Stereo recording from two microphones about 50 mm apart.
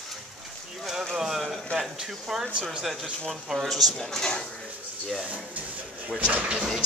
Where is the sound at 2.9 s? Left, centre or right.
Centre.